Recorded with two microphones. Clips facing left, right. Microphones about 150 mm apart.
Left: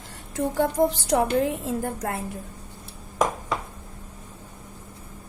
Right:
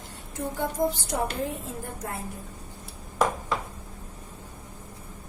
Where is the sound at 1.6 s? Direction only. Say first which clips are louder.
Left 8 dB; 85° left.